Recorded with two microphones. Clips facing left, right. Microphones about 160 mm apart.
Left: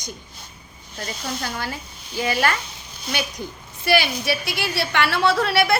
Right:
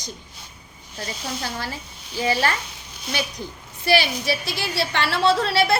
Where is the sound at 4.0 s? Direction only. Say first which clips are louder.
Left 1 dB; 25° right (ahead or behind).